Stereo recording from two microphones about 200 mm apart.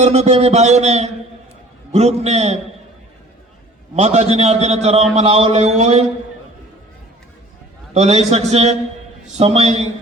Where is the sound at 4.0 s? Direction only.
35° right (ahead or behind).